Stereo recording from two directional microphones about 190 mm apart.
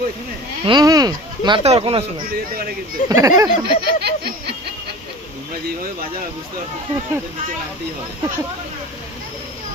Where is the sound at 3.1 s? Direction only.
20° right (ahead or behind).